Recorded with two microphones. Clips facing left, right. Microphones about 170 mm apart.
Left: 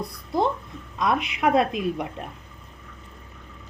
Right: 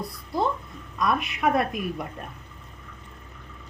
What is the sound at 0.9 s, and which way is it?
A woman's voice, 20° left (ahead or behind).